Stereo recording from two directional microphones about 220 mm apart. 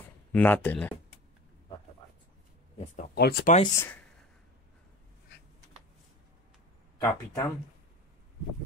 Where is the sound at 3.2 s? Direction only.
45° left (ahead or behind).